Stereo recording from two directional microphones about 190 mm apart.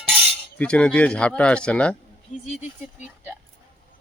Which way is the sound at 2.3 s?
40° left (ahead or behind).